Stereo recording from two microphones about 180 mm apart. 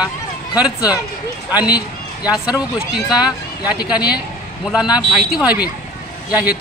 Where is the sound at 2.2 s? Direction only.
5° right (ahead or behind).